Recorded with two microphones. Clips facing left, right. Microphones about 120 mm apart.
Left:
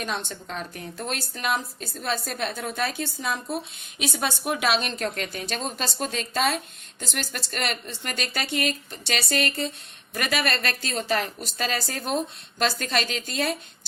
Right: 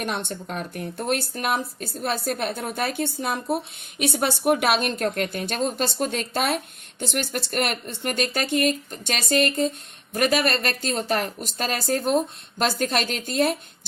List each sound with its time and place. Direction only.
0.0 s speech: 60° right (ahead or behind)